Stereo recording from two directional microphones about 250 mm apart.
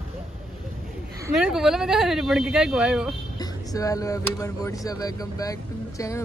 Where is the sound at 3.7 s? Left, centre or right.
Centre.